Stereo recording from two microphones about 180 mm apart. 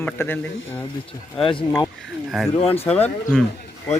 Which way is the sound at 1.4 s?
30° left (ahead or behind).